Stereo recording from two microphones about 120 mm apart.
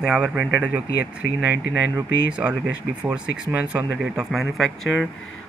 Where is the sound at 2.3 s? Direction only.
10° right (ahead or behind).